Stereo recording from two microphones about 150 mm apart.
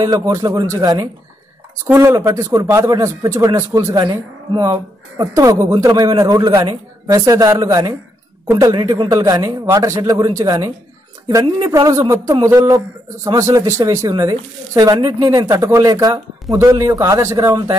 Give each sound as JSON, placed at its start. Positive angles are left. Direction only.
{"t": 0.0, "sound": "speech", "side_deg": -20}